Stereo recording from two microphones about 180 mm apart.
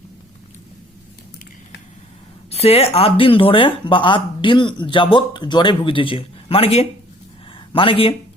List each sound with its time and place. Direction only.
2.5 s speech: 35° left (ahead or behind)